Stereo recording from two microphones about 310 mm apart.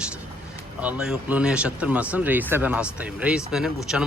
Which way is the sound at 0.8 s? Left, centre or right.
Centre.